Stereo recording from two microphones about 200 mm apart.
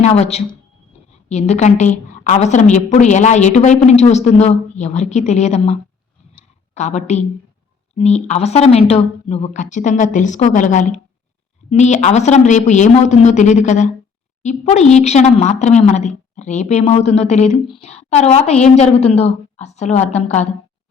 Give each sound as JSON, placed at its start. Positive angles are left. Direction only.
{"t": 0.0, "sound": "a woman's voice", "side_deg": 35}
{"t": 6.7, "sound": "a woman's voice", "side_deg": 35}